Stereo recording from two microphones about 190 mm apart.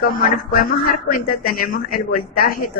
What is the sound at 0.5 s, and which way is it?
Speech, 50° left (ahead or behind).